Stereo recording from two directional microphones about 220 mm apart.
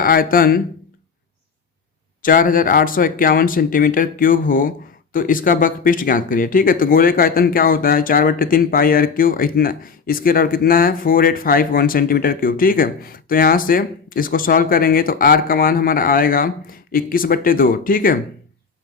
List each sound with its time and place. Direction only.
0.0 s speech: 40° left (ahead or behind)
2.2 s speech: 40° left (ahead or behind)